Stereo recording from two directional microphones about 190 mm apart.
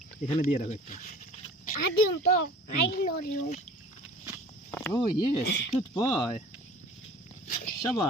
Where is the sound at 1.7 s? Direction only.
45° left (ahead or behind).